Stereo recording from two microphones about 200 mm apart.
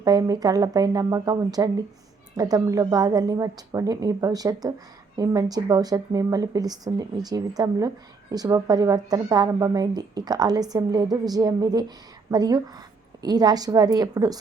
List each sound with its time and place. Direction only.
0.0 s speech: 20° right (ahead or behind)